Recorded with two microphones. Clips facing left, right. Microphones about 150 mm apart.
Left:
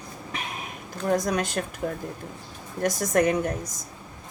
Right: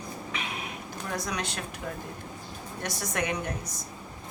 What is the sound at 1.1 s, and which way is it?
Speech, 45° left (ahead or behind).